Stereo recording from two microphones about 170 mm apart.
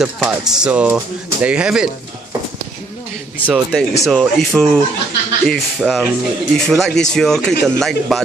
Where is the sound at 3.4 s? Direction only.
Centre (ahead or behind).